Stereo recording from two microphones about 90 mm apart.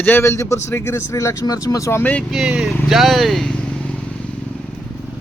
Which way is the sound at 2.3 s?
10° right (ahead or behind).